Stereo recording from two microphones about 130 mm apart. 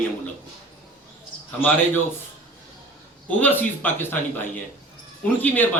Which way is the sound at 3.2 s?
15° left (ahead or behind).